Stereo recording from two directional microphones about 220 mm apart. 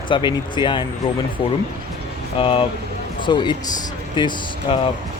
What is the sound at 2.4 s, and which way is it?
Speech, 25° left (ahead or behind).